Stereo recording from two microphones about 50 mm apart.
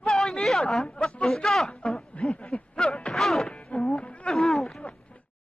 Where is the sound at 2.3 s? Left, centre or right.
Left.